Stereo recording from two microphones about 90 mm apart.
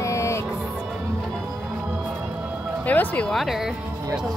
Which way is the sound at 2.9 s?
20° left (ahead or behind).